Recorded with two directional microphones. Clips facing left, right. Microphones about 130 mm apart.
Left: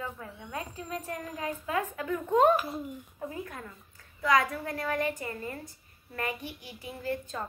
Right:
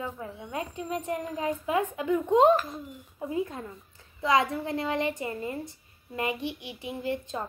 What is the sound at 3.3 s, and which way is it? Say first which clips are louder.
A woman's voice: right 8 dB; 20° right (ahead or behind).